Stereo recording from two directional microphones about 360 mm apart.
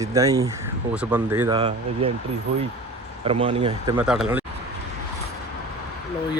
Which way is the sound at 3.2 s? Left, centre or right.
Centre.